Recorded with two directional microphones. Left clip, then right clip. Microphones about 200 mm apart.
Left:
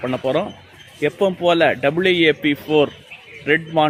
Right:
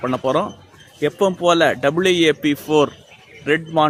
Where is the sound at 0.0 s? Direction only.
10° right (ahead or behind).